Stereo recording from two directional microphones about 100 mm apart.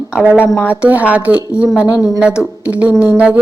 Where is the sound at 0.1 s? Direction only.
10° right (ahead or behind).